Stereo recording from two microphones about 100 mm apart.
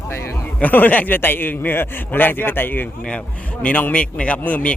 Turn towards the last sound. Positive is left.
turn(degrees=15)  # may be behind; listen again after turning